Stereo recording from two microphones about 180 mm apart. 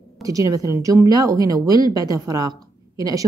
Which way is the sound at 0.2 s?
20° right (ahead or behind).